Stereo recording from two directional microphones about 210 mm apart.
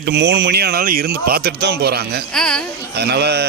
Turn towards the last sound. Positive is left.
turn(degrees=-50)  # may be behind; listen again after turning